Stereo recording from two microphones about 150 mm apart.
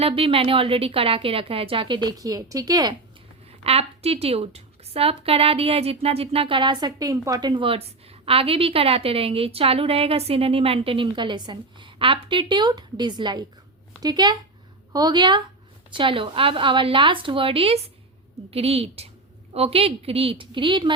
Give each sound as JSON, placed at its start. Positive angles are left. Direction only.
{"t": 0.0, "sound": "a woman's voice", "side_deg": -35}
{"t": 3.6, "sound": "a woman's voice", "side_deg": -40}